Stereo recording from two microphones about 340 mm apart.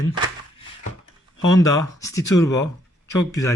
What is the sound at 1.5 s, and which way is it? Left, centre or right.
A man's voice, centre.